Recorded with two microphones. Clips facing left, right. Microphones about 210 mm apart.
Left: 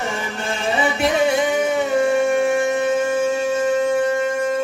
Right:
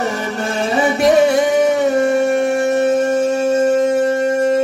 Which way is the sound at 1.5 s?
40° right (ahead or behind).